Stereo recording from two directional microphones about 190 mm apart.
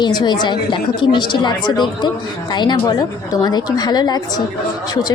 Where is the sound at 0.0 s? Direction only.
20° left (ahead or behind).